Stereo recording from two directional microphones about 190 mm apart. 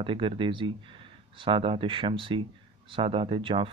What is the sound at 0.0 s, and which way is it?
Speech, 25° right (ahead or behind).